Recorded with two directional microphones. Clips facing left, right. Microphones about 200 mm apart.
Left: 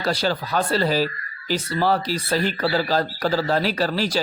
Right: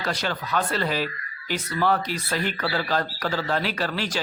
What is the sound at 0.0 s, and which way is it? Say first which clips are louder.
Speech: left 5 dB; 35° left (ahead or behind).